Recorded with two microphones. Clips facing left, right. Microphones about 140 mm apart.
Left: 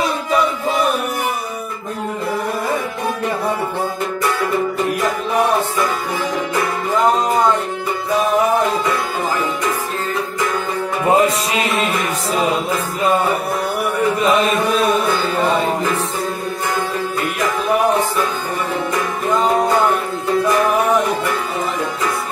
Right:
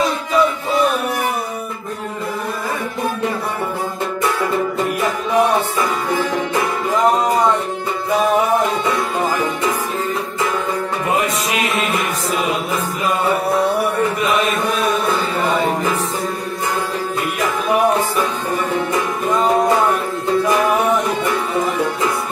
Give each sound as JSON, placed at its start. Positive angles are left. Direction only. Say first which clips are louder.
{"t": 11.1, "sound": "music", "louder": "left 6 dB", "side_deg": 30}